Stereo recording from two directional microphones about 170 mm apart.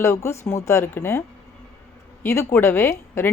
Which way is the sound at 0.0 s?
15° left (ahead or behind).